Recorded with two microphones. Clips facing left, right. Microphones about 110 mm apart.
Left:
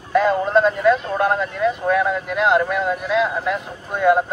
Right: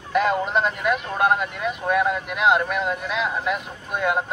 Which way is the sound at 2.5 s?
20° left (ahead or behind).